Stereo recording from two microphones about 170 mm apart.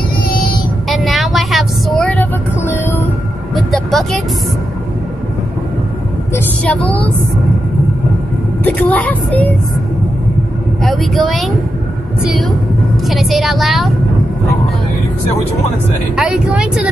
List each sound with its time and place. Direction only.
0.3 s child singing: 60° left (ahead or behind)
0.8 s vehicle: centre (ahead or behind)
3.5 s vehicle: centre (ahead or behind)
6.3 s a woman's voice: 10° left (ahead or behind)
8.6 s a woman's voice: 10° left (ahead or behind)
10.8 s a woman's voice: centre (ahead or behind)
16.2 s a woman's voice: 5° right (ahead or behind)